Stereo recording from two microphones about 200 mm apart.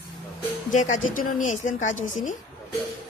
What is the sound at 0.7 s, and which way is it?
A woman's voice, 40° left (ahead or behind).